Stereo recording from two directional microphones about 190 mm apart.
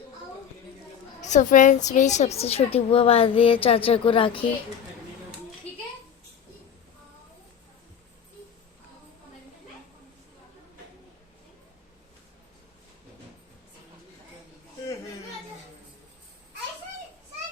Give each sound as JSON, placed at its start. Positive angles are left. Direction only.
{"t": 1.2, "sound": "a woman's voice", "side_deg": 40}